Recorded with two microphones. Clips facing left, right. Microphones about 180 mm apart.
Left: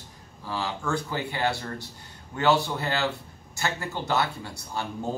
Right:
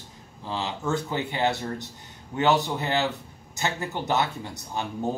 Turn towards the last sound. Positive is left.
turn(degrees=-20)  # may be behind; listen again after turning